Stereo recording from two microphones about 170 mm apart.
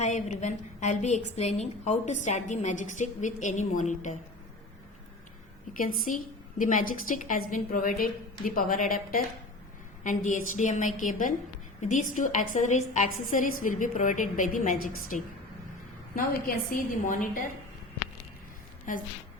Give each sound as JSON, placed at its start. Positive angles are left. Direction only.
{"t": 0.0, "sound": "a woman's voice", "side_deg": 45}
{"t": 5.7, "sound": "a woman's voice", "side_deg": 55}
{"t": 16.7, "sound": "a woman's voice", "side_deg": 50}
{"t": 18.9, "sound": "a woman's voice", "side_deg": 50}